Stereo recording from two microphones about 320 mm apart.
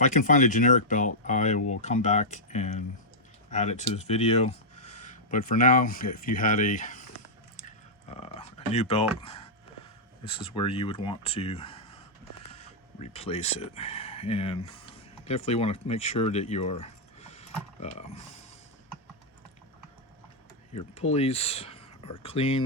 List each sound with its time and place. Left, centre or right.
0.0 s speech: left
7.6 s typing: centre
9.2 s speech: centre
20.7 s speech: centre